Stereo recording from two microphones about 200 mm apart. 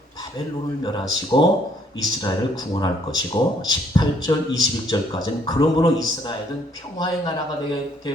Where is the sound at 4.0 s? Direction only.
20° left (ahead or behind).